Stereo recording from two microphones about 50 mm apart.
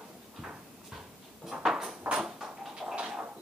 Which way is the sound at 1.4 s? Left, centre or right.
Centre.